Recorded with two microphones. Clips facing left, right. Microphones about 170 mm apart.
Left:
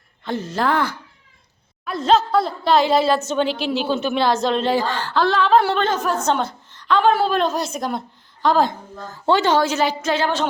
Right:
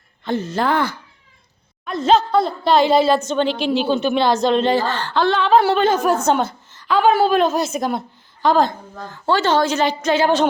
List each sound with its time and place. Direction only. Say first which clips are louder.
0.3 s a woman's voice: right 2 dB; centre (ahead or behind)
9.2 s a woman's voice: even; 15° left (ahead or behind)
10.2 s a sound: right 5 dB; 15° right (ahead or behind)